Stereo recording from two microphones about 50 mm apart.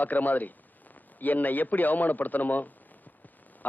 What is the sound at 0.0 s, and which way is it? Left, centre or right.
A man's voice, left.